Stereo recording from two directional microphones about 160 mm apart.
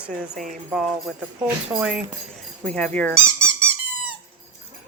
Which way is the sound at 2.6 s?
5° left (ahead or behind).